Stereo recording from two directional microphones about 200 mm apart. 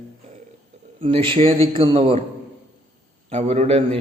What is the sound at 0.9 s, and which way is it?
A man's voice, 25° right (ahead or behind).